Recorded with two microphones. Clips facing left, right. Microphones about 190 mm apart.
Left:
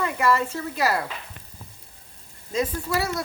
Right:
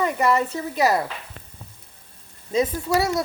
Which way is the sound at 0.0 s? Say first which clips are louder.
Right 2 dB; 20° right (ahead or behind).